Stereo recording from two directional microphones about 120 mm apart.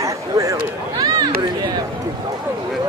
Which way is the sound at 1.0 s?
35° right (ahead or behind).